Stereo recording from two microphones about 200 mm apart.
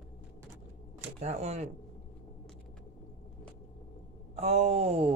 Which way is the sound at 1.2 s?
35° right (ahead or behind).